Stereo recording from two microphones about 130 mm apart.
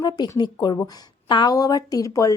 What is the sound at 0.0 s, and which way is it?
A woman's voice, 35° left (ahead or behind).